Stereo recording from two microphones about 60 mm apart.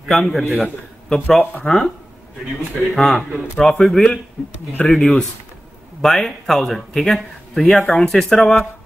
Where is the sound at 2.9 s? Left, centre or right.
Centre.